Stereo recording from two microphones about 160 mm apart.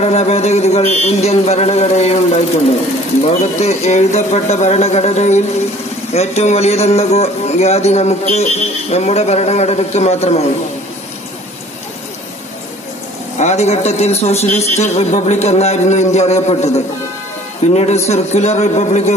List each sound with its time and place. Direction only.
0.0 s a man's voice: 40° left (ahead or behind)
13.4 s a man's voice: 45° left (ahead or behind)
17.7 s a man's voice: 45° left (ahead or behind)